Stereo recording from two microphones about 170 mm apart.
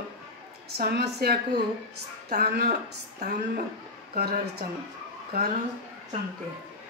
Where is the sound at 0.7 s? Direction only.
70° right (ahead or behind).